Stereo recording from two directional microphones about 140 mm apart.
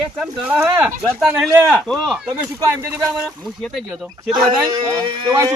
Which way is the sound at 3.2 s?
Centre (ahead or behind).